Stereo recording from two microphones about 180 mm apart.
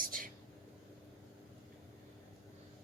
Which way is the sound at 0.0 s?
50° right (ahead or behind).